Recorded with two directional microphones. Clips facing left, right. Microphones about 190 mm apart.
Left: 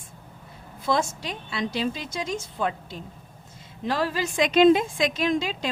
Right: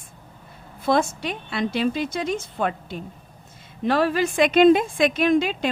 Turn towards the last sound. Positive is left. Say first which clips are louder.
# right 5 dB
turn(degrees=-55)  # may be behind; listen again after turning